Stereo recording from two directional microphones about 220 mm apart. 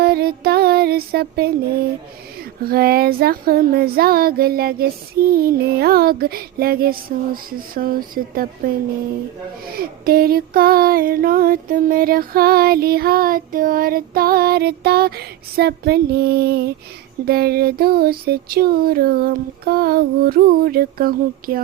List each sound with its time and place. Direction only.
0.0 s music: 45° right (ahead or behind)
2.6 s music: 45° right (ahead or behind)
7.5 s speech: 40° right (ahead or behind)
9.6 s music: 45° right (ahead or behind)